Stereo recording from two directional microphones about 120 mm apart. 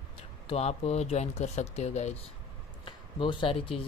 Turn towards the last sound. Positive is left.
turn(degrees=50)  # may be behind; listen again after turning